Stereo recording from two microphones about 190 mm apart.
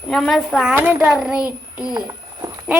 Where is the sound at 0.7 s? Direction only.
10° right (ahead or behind).